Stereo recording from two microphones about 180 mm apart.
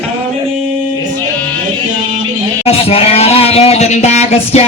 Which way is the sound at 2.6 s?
35° left (ahead or behind).